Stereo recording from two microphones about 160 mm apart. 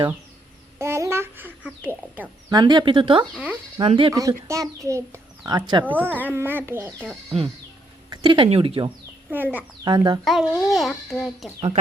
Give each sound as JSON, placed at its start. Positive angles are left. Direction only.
{"t": 0.8, "sound": "a sound", "side_deg": -15}
{"t": 2.5, "sound": "speech", "side_deg": -25}
{"t": 4.1, "sound": "speech", "side_deg": -20}
{"t": 5.9, "sound": "a child's voice", "side_deg": -10}
{"t": 8.1, "sound": "speech", "side_deg": -30}
{"t": 9.3, "sound": "a child's voice", "side_deg": -10}
{"t": 9.8, "sound": "speech", "side_deg": -25}
{"t": 10.2, "sound": "a child's voice", "side_deg": 0}